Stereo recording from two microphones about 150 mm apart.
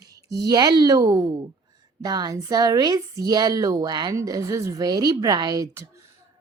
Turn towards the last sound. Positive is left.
turn(degrees=-20)  # may be behind; listen again after turning